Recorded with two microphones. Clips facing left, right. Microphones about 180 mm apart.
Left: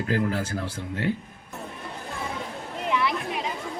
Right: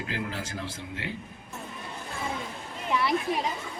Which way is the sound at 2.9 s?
35° right (ahead or behind).